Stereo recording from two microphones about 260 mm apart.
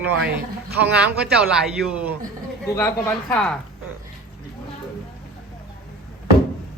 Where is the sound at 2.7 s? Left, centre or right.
Centre.